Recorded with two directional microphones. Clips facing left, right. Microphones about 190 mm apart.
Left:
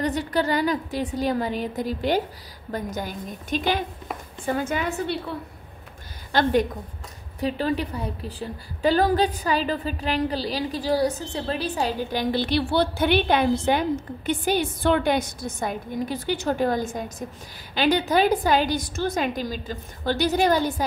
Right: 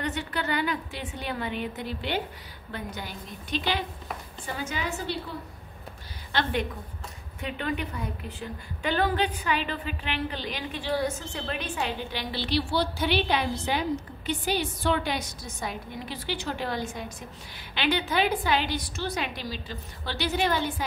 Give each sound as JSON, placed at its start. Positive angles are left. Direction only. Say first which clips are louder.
{"t": 0.0, "sound": "a woman's voice", "louder": "left 7 dB", "side_deg": 35}
{"t": 6.3, "sound": "a woman's voice", "louder": "left 7 dB", "side_deg": 40}